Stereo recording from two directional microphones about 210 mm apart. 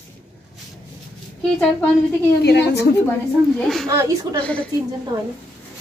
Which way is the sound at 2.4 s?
55° left (ahead or behind).